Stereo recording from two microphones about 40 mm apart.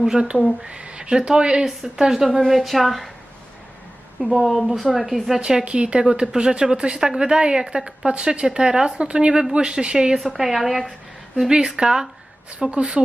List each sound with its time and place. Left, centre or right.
0.1 s a woman's voice: right
2.4 s a woman's voice: centre
4.3 s a woman's voice: centre
5.4 s a woman's voice: centre
10.2 s a woman's voice: centre
11.4 s a woman's voice: centre